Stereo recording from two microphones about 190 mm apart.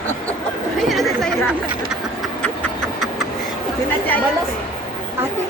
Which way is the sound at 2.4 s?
5° left (ahead or behind).